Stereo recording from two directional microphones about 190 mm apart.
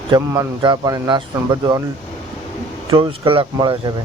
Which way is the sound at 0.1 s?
15° right (ahead or behind).